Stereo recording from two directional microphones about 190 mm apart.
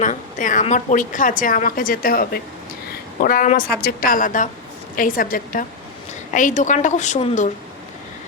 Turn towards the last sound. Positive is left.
turn(degrees=40)  # may be behind; listen again after turning